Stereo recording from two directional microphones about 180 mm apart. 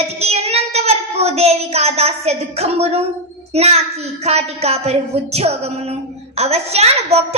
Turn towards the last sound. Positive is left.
turn(degrees=-35)  # may be behind; listen again after turning